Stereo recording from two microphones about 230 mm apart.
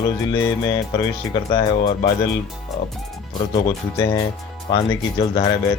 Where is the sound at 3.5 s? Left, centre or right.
Centre.